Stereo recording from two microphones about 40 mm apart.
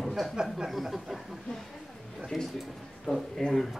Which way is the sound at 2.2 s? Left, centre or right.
Centre.